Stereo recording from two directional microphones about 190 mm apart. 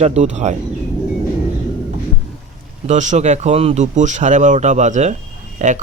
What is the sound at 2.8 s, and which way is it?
Speech, 40° right (ahead or behind).